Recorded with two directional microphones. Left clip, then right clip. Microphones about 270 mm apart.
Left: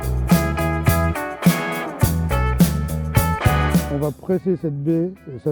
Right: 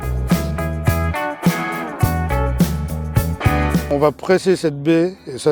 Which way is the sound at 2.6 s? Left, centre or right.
Centre.